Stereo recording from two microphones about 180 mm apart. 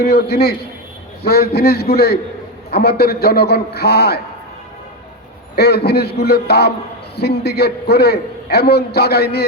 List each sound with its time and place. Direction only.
0.0 s a man's voice: 60° left (ahead or behind)
5.5 s a man's voice: 65° left (ahead or behind)